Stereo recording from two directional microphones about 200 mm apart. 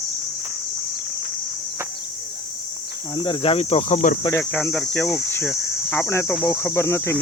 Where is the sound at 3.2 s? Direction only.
25° left (ahead or behind).